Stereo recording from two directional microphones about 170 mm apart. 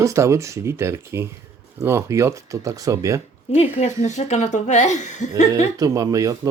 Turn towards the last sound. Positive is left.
turn(degrees=-20)  # may be behind; listen again after turning